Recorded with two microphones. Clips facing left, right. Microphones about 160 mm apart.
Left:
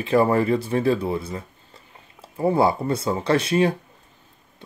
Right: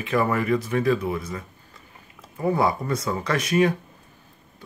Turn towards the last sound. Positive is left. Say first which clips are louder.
# left 2 dB
turn(degrees=30)  # may be behind; listen again after turning